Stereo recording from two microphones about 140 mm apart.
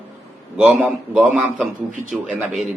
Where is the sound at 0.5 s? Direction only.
10° right (ahead or behind).